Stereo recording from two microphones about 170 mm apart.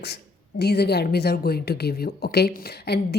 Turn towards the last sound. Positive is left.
turn(degrees=75)  # may be behind; listen again after turning